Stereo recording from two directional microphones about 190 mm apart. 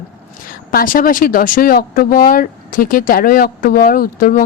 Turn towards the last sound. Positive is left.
turn(degrees=50)  # may be behind; listen again after turning